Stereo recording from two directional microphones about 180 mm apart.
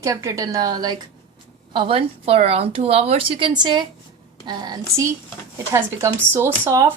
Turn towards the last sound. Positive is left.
turn(degrees=-15)  # may be behind; listen again after turning